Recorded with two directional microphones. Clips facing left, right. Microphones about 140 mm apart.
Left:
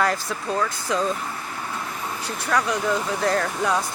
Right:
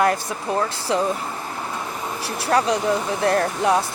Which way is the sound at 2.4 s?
30° right (ahead or behind).